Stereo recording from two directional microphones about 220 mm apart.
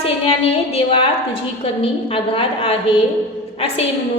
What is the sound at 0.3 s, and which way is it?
A woman's voice, 25° left (ahead or behind).